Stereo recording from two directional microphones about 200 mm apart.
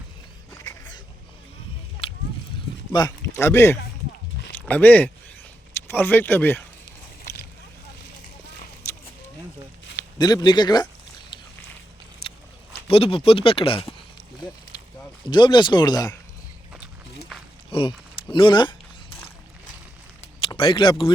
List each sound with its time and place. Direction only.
0.6 s a sound: 20° left (ahead or behind)
2.9 s speech: 15° left (ahead or behind)
7.3 s boat: 15° left (ahead or behind)
9.9 s speech: 15° left (ahead or behind)
12.9 s speech: 30° left (ahead or behind)
15.3 s speech: 20° left (ahead or behind)
17.7 s a sound: 25° left (ahead or behind)
20.4 s speech: 25° left (ahead or behind)